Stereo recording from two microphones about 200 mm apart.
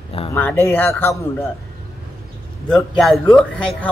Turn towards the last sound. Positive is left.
turn(degrees=5)  # may be behind; listen again after turning